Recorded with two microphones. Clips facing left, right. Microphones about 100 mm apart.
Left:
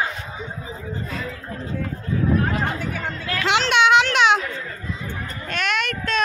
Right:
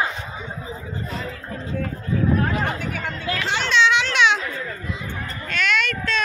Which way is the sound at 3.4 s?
85° left.